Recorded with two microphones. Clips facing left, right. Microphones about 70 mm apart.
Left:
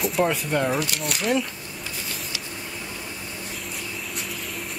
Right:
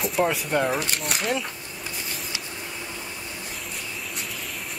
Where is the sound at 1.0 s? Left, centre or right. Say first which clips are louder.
Left 3 dB; centre.